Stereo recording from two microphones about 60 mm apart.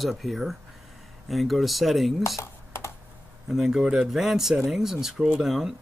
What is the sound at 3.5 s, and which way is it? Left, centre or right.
Speech, centre.